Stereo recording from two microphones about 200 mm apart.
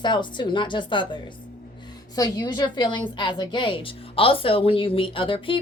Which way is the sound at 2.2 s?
20° left (ahead or behind).